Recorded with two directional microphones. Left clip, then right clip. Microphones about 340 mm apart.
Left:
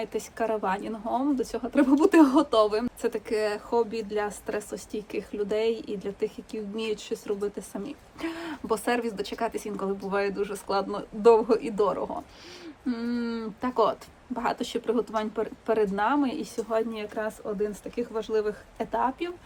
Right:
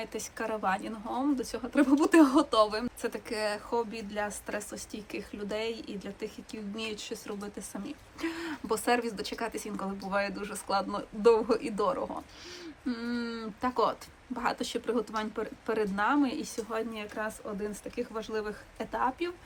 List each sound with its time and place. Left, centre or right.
0.0 s a woman's voice: centre